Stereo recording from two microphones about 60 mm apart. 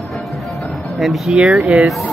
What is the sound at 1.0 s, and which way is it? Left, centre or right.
Speech, centre.